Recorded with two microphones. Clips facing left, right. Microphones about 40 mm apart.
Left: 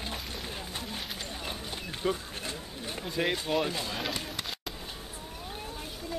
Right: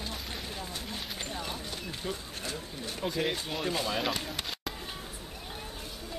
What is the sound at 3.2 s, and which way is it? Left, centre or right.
Speech, centre.